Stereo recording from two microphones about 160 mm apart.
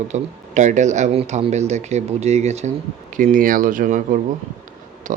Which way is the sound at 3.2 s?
55° right (ahead or behind).